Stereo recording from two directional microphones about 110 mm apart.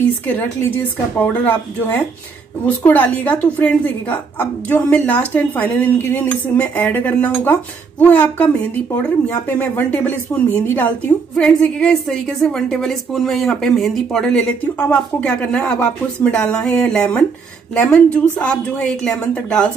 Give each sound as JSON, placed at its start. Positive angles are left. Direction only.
{"t": 0.3, "sound": "a woman's voice", "side_deg": 15}